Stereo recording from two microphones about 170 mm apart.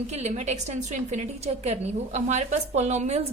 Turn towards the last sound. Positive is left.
turn(degrees=-40)  # may be behind; listen again after turning